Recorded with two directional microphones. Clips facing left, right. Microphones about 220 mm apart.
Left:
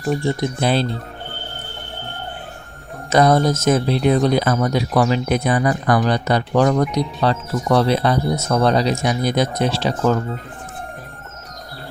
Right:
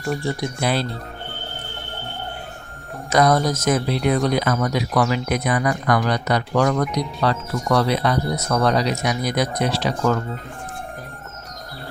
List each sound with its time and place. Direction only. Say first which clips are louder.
0.3 s speech: left 4 dB; 25° left (ahead or behind)
3.1 s speech: left 3 dB; 25° left (ahead or behind)